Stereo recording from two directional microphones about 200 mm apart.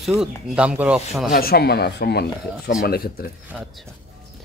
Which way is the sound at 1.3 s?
50° left (ahead or behind).